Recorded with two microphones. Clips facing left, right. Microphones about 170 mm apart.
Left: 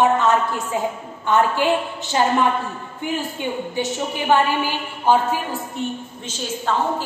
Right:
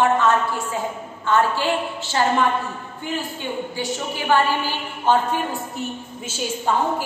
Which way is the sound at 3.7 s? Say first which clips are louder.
Left 3 dB; 20° left (ahead or behind).